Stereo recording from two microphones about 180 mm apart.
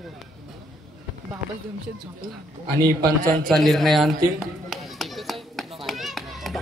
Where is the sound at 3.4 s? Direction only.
Centre (ahead or behind).